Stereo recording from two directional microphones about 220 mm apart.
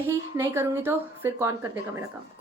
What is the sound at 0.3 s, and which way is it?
A woman's voice, 10° right (ahead or behind).